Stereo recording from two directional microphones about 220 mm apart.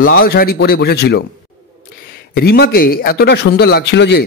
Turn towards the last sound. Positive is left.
turn(degrees=50)  # may be behind; listen again after turning